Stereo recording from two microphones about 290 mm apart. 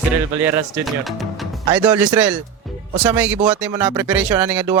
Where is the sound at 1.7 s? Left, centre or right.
Centre.